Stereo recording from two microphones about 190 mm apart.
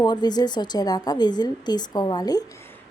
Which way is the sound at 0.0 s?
20° left (ahead or behind).